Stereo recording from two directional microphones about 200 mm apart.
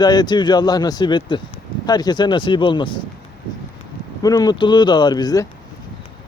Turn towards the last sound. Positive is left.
turn(degrees=20)  # may be behind; listen again after turning